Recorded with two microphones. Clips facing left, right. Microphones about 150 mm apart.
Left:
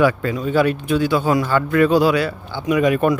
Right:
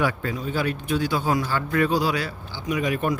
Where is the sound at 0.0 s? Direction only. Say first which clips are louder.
Left 8 dB; 90° left.